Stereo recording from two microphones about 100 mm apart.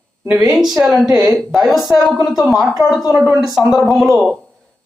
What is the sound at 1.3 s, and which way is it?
A woman's voice, centre (ahead or behind).